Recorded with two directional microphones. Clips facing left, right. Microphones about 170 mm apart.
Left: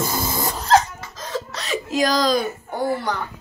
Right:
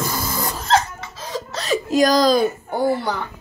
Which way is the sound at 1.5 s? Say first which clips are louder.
Right 7 dB; 40° right (ahead or behind).